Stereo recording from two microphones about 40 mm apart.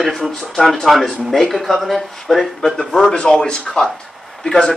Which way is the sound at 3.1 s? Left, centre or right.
Centre.